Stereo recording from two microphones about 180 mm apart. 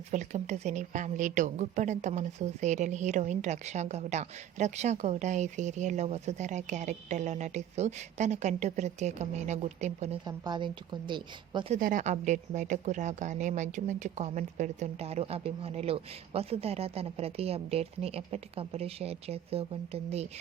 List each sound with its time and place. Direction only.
0.1 s a woman's voice: 40° right (ahead or behind)
10.2 s speech: 25° right (ahead or behind)
11.7 s a woman's voice: 45° right (ahead or behind)